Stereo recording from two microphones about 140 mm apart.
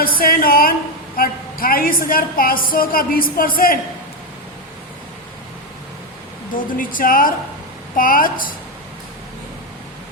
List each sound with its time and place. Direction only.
0.0 s a woman's voice: 90° left
6.5 s speech: 80° left